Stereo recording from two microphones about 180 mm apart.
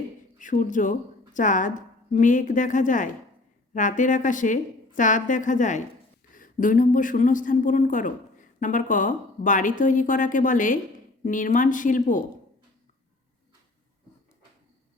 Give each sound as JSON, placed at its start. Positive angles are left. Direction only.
{"t": 0.3, "sound": "a woman's voice", "side_deg": 45}